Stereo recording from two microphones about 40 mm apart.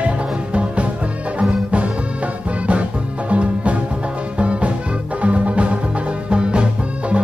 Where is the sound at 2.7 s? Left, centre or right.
Right.